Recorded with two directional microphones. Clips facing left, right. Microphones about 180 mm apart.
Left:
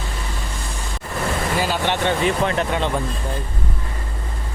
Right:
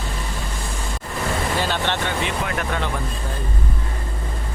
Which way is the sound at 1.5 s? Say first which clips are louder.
Left 2 dB; 10° left (ahead or behind).